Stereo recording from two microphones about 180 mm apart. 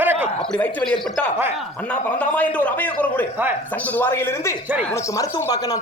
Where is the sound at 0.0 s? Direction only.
10° right (ahead or behind).